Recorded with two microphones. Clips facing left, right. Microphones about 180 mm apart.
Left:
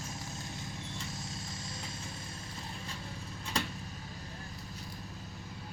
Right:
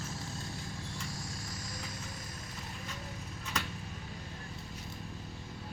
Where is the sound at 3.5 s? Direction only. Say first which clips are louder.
Left 3 dB; 30° left (ahead or behind).